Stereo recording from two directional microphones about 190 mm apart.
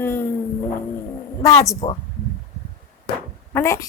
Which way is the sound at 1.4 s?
20° left (ahead or behind).